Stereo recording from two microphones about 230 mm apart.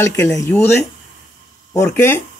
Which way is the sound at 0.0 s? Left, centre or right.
Centre.